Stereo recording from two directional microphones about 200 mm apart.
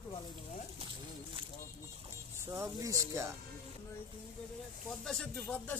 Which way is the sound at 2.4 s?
15° right (ahead or behind).